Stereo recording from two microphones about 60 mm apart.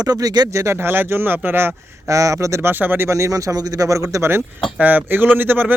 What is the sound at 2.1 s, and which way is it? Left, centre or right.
Speech, right.